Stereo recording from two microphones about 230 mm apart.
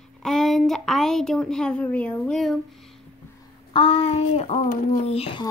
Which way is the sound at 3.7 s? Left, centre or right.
Left.